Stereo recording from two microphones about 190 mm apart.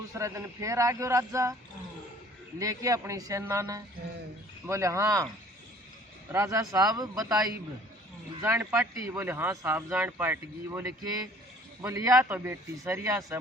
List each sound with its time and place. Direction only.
0.1 s speech: 15° right (ahead or behind)
2.6 s speech: 15° right (ahead or behind)
6.3 s speech: 15° right (ahead or behind)
8.4 s speech: 15° right (ahead or behind)